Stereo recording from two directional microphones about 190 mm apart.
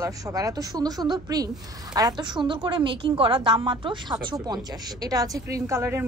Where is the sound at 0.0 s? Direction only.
15° right (ahead or behind).